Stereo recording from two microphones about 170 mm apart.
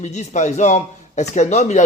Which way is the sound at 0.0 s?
40° left (ahead or behind).